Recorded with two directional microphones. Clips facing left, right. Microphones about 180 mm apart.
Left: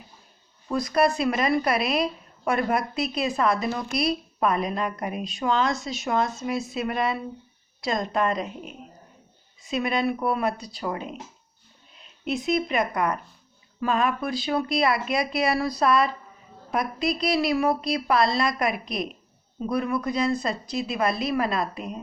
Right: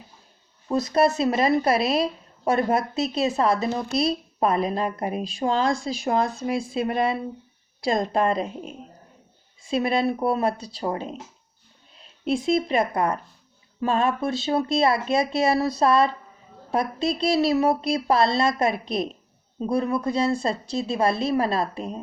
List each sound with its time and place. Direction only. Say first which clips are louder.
0.7 s a woman's voice: right 2 dB; 25° right (ahead or behind)